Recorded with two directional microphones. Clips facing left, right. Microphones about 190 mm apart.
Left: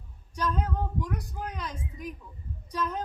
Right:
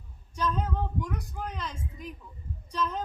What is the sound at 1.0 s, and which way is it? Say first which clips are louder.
Speech: left 1 dB; 10° left (ahead or behind).